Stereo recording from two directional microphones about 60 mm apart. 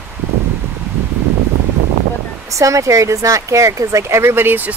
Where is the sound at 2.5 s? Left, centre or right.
Right.